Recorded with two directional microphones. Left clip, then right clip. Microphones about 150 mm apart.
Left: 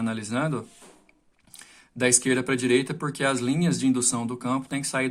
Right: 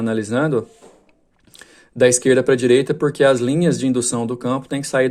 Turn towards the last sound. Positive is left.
turn(degrees=-30)  # may be behind; listen again after turning